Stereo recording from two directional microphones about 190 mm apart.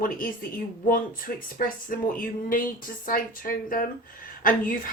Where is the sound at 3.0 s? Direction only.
50° left (ahead or behind).